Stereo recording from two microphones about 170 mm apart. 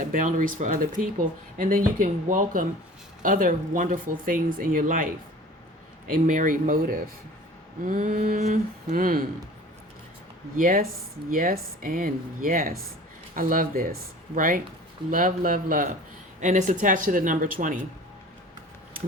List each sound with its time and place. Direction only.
0.0 s speech: 50° right (ahead or behind)
6.2 s speech: 50° right (ahead or behind)
10.6 s speech: 50° right (ahead or behind)